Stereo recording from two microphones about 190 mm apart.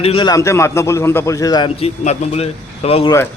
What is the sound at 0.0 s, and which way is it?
Speech, 30° left (ahead or behind).